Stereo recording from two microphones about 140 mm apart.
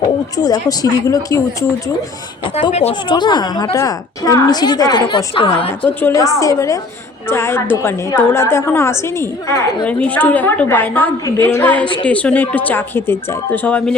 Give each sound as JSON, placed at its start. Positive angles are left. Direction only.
{"t": 0.3, "sound": "a woman's voice", "side_deg": 25}
{"t": 3.1, "sound": "a woman's voice", "side_deg": 30}
{"t": 6.0, "sound": "a woman's voice", "side_deg": 20}
{"t": 9.8, "sound": "a woman's voice", "side_deg": 10}